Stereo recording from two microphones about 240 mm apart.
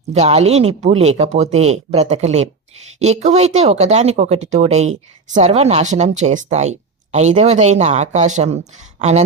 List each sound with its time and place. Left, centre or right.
0.1 s speech: right